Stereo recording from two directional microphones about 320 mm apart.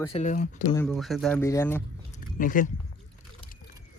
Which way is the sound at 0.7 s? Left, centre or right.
Centre.